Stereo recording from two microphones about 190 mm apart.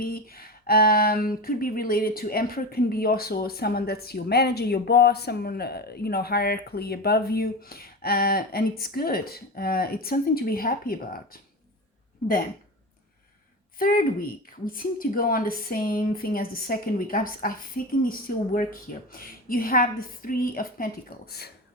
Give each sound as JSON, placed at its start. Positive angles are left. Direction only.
{"t": 0.0, "sound": "speech", "side_deg": 50}
{"t": 13.7, "sound": "speech", "side_deg": 50}